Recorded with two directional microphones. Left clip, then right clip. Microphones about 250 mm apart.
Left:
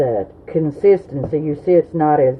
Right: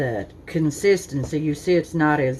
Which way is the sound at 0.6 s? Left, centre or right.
Right.